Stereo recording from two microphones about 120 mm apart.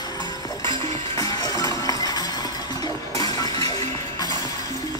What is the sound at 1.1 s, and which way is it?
Music, 30° left (ahead or behind).